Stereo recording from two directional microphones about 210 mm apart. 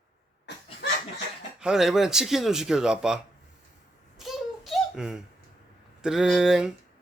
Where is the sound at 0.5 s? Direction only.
55° left (ahead or behind).